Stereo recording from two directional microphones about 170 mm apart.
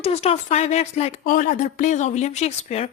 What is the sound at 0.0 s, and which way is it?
Speech, 35° left (ahead or behind).